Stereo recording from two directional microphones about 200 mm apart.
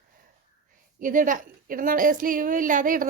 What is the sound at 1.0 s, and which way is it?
A woman's voice, 40° right (ahead or behind).